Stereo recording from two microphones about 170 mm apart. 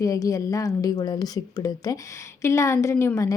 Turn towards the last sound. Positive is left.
turn(degrees=15)  # may be behind; listen again after turning